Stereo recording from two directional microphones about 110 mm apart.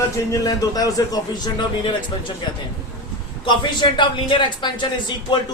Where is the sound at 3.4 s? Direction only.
45° left (ahead or behind).